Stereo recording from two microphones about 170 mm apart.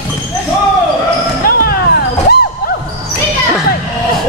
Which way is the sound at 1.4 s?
60° left (ahead or behind).